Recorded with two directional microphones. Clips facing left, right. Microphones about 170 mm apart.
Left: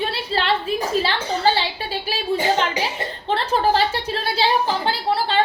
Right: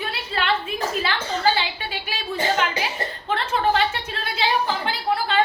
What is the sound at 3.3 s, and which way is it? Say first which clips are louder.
A woman's voice: left 3 dB; 35° left (ahead or behind).